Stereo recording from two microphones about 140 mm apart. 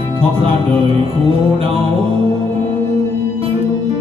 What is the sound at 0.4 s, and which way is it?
Music, 40° right (ahead or behind).